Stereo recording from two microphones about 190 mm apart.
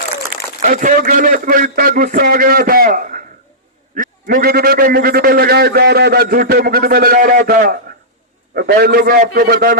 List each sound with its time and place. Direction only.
0.6 s a man's voice: 45° right (ahead or behind)